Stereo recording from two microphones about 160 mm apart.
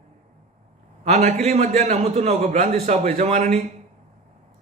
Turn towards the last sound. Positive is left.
turn(degrees=-45)  # may be behind; listen again after turning